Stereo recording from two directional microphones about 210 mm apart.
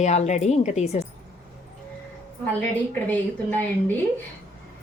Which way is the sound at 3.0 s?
10° left (ahead or behind).